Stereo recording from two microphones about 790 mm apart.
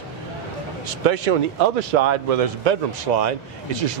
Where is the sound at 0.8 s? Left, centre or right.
Right.